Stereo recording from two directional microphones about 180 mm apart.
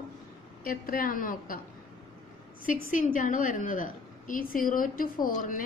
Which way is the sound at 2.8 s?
45° left (ahead or behind).